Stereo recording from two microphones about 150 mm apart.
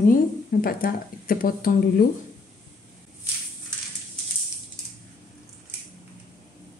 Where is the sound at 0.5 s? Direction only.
75° left (ahead or behind).